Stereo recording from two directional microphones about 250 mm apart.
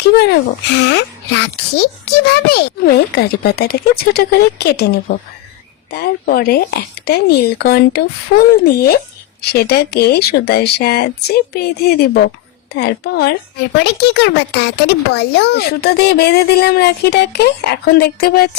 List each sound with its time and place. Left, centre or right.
0.0 s a woman's voice: left
12.7 s a woman's voice: left